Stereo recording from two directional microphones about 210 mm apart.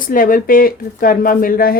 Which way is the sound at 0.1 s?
40° left (ahead or behind).